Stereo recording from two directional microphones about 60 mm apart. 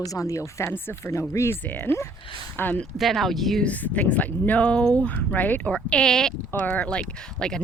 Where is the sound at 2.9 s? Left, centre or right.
Centre.